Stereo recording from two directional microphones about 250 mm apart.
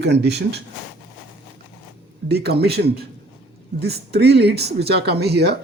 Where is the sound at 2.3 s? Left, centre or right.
Right.